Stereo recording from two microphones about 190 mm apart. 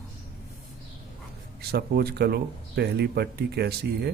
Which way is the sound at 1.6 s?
55° right (ahead or behind).